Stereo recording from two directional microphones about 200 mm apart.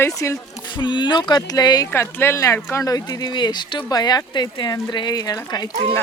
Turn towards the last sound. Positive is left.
turn(degrees=20)  # may be behind; listen again after turning